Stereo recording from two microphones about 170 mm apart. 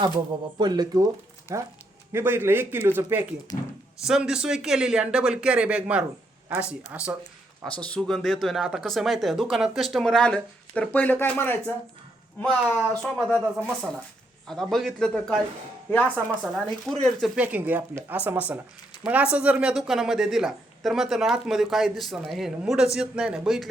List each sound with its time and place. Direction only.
0.6 s speech: 25° right (ahead or behind); by 7.2 s 5° right (ahead or behind)
7.6 s speech: 5° left (ahead or behind)